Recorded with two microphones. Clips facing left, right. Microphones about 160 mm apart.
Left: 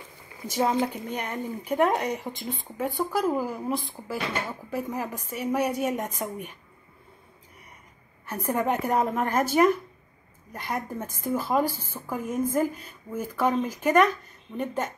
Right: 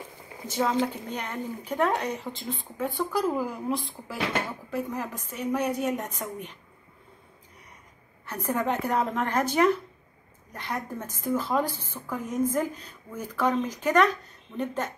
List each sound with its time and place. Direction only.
0.5 s a woman's voice: 10° left (ahead or behind)
8.3 s a woman's voice: 10° left (ahead or behind)